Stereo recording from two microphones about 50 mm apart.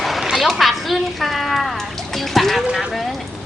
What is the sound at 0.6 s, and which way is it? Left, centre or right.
A child's voice, centre.